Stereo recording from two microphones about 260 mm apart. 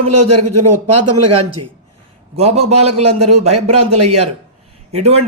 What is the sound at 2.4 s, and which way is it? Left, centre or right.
Speech, right.